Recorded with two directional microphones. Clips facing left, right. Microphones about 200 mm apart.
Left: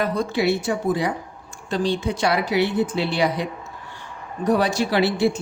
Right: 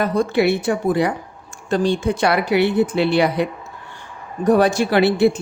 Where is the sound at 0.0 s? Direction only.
50° right (ahead or behind).